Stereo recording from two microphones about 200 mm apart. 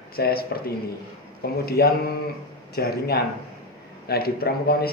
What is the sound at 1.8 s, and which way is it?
A man's voice, 50° left (ahead or behind).